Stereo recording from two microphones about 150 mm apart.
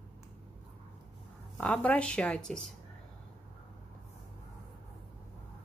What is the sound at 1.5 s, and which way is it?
Speech, 10° left (ahead or behind).